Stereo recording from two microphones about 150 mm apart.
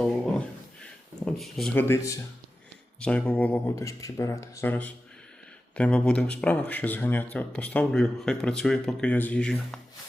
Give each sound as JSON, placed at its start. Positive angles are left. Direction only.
{"t": 0.0, "sound": "a sound", "side_deg": 5}
{"t": 1.7, "sound": "speech", "side_deg": 15}
{"t": 3.8, "sound": "speech", "side_deg": 20}